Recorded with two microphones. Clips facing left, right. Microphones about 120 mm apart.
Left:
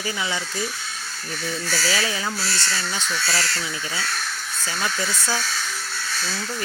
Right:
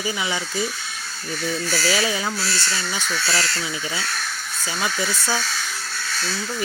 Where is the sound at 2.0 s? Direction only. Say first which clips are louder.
Right 3 dB; 20° right (ahead or behind).